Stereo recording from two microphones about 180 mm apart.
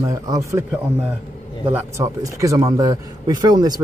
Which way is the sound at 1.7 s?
15° right (ahead or behind).